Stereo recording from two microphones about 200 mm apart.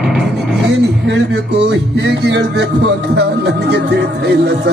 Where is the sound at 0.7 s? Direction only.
60° right (ahead or behind).